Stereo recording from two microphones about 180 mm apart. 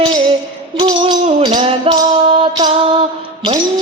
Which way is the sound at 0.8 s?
25° right (ahead or behind).